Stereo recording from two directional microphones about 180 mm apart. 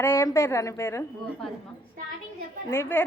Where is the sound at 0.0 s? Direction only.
15° left (ahead or behind).